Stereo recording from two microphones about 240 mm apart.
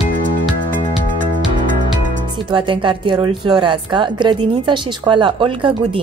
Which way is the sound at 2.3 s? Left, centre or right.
Right.